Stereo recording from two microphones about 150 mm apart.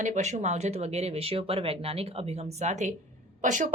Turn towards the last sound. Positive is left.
turn(degrees=-60)  # may be behind; listen again after turning